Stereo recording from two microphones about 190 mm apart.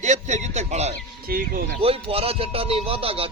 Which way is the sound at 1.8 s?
30° right (ahead or behind).